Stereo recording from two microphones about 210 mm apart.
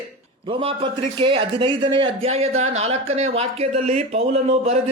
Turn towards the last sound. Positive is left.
turn(degrees=-30)  # may be behind; listen again after turning